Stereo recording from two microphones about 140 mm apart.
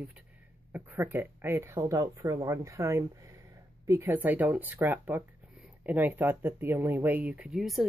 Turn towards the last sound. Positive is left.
turn(degrees=0)  # may be behind; listen again after turning